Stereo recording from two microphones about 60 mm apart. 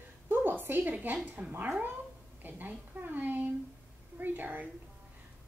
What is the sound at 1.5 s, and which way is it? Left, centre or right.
Speech, right.